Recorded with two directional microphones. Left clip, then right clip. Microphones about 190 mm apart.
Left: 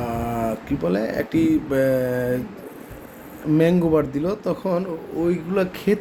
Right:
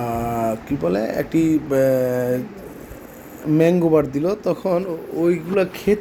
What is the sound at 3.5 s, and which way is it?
A man's voice, centre (ahead or behind).